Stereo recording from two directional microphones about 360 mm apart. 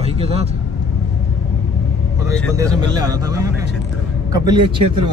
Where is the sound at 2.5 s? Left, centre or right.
Centre.